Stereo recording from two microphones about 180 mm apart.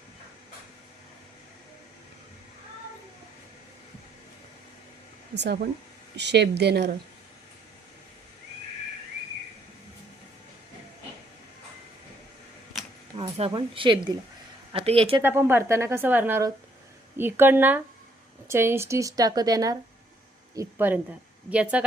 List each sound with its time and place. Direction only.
5.3 s speech: 70° right (ahead or behind)
13.1 s a sound: 35° right (ahead or behind)
13.5 s a woman's voice: 25° right (ahead or behind)
15.2 s a woman's voice: 10° right (ahead or behind)